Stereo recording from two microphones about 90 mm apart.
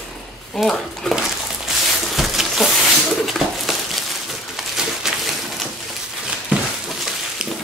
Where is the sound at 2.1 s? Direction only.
Centre (ahead or behind).